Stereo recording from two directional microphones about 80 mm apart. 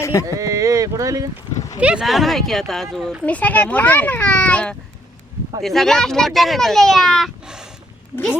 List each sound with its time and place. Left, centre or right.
0.0 s speech: left
0.3 s speech: right
1.8 s speech: centre
2.0 s speech: centre
3.2 s a child's voice: centre
5.6 s speech: centre
7.4 s a sound: centre